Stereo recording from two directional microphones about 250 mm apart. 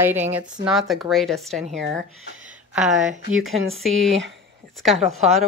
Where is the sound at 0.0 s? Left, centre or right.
Centre.